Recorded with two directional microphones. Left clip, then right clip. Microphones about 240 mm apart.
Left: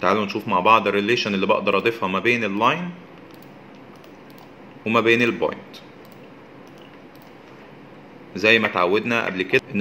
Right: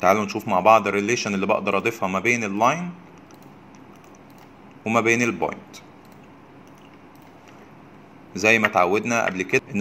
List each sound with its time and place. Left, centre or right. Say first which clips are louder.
0.0 s speech: right 1 dB; right
4.8 s speech: left 2 dB; right
8.4 s speech: even; right